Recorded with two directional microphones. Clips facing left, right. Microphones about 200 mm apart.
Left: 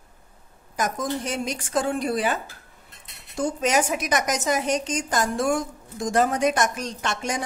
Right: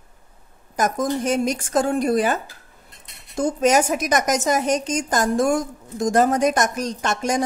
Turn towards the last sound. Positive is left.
turn(degrees=-45)  # may be behind; listen again after turning